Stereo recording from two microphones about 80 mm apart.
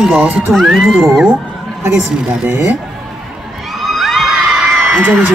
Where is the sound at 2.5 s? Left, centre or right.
Right.